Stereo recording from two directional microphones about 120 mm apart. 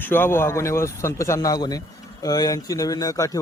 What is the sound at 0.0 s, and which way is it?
Speech, 20° left (ahead or behind).